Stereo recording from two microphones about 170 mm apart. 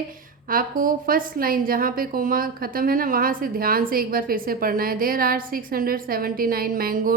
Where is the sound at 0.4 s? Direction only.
55° right (ahead or behind).